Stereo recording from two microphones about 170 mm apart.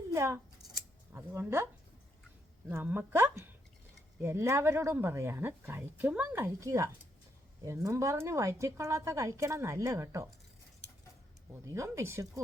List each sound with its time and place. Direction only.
0.1 s speech: 15° right (ahead or behind)
2.6 s speech: 10° right (ahead or behind)
11.5 s speech: 15° right (ahead or behind)